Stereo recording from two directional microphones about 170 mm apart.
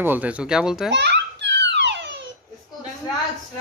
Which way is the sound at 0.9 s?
90° right.